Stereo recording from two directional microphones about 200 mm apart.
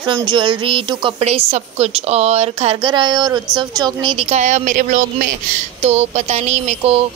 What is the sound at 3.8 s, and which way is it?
Speech, 25° right (ahead or behind).